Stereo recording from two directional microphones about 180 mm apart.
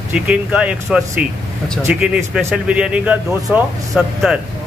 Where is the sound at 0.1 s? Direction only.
5° right (ahead or behind).